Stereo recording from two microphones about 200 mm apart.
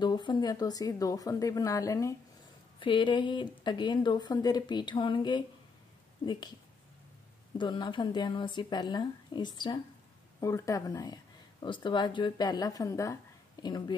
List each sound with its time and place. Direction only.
0.0 s speech: 20° left (ahead or behind)
7.5 s speech: 25° left (ahead or behind)